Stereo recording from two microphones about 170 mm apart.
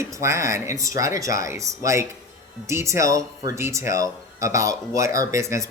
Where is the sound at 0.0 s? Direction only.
15° right (ahead or behind).